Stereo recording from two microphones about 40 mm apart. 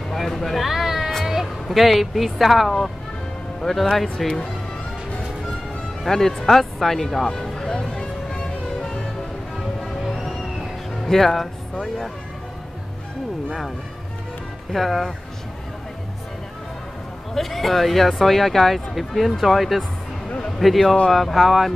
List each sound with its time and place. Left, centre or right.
0.1 s a sound: centre
1.2 s speech: centre
3.8 s speech: centre
6.0 s speech: centre
7.7 s music: centre
10.2 s music: centre
14.7 s speech: centre
17.3 s a man's voice: centre